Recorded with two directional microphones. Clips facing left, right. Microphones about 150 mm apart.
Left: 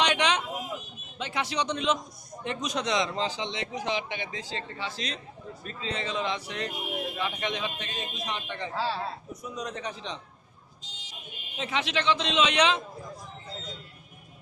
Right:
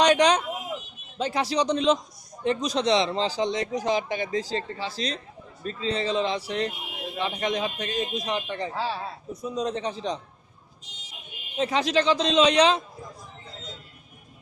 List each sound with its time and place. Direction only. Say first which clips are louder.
0.0 s a sound: right 7 dB; 40° right (ahead or behind)
1.2 s speech: right 6 dB; 35° right (ahead or behind)
8.7 s speech: left 3 dB; 15° right (ahead or behind)
9.3 s speech: right 7 dB; 30° right (ahead or behind)
11.5 s speech: right 7 dB; 40° right (ahead or behind)